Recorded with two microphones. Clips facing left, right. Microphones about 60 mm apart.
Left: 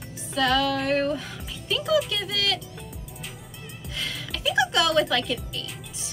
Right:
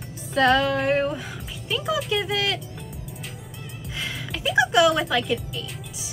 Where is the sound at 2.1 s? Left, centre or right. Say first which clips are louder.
Right 3 dB; right.